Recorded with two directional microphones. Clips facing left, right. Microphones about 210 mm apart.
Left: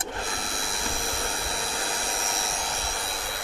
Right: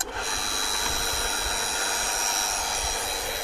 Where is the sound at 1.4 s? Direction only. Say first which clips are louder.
Left 1 dB; 5° right (ahead or behind).